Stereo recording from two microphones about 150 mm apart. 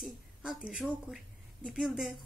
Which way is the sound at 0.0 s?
5° right (ahead or behind).